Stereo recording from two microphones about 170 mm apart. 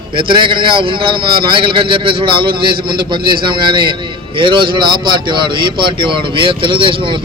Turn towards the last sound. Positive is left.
turn(degrees=-30)  # may be behind; listen again after turning